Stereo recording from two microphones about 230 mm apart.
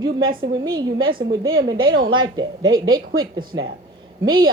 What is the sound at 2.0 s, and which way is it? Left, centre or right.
Speech, centre.